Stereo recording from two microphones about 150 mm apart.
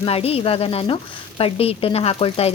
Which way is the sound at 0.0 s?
40° left (ahead or behind).